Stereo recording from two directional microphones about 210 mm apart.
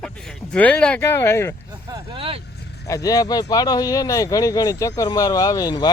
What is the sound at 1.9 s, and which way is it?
Vehicle, 25° right (ahead or behind).